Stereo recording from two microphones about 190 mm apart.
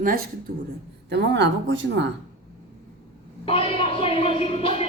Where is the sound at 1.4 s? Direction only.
75° right (ahead or behind).